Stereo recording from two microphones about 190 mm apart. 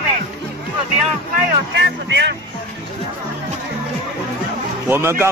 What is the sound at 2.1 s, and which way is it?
Speech, 65° right (ahead or behind).